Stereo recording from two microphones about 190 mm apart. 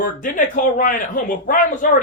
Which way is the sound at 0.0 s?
45° left (ahead or behind).